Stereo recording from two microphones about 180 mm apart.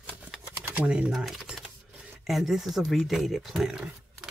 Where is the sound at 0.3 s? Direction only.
10° right (ahead or behind).